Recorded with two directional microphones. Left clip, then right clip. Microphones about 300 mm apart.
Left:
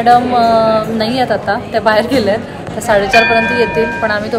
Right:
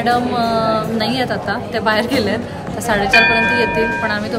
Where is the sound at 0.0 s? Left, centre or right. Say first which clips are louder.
Left 7 dB; centre.